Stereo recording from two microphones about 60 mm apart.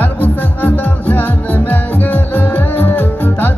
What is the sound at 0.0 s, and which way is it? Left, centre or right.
Music, left.